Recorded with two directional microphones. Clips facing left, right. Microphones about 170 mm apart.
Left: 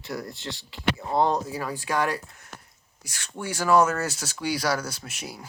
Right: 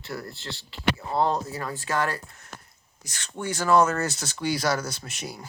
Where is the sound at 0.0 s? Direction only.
15° left (ahead or behind).